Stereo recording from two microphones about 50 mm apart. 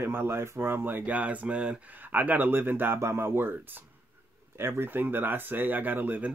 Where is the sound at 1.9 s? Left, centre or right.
Right.